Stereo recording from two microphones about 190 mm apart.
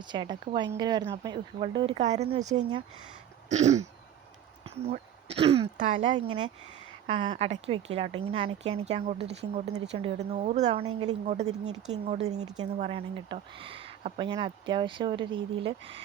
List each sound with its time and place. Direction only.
0.0 s speech: 25° right (ahead or behind)